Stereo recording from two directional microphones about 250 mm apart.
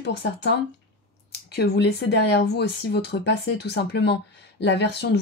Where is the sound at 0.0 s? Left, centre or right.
Left.